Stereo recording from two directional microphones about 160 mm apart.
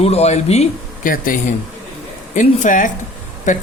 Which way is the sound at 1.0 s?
60° left (ahead or behind).